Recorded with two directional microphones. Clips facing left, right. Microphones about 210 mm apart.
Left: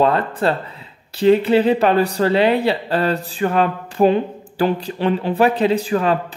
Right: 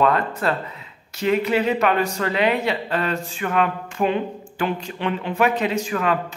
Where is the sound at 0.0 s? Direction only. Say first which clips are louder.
Left 3 dB; 30° left (ahead or behind).